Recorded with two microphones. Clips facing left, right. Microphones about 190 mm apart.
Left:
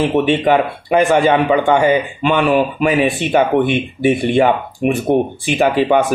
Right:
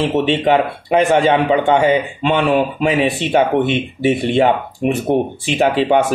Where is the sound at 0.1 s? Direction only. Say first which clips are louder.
Left 1 dB; 25° right (ahead or behind).